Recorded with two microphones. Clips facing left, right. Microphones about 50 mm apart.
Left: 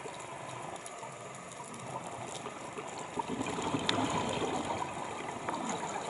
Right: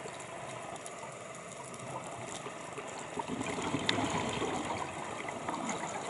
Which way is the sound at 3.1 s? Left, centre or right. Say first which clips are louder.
Left 1 dB; centre.